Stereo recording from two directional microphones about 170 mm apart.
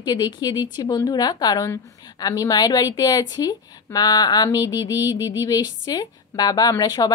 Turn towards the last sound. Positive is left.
turn(degrees=20)  # may be behind; listen again after turning